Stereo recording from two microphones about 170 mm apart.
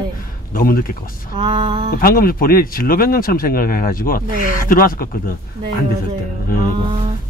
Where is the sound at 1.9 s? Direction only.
60° left (ahead or behind).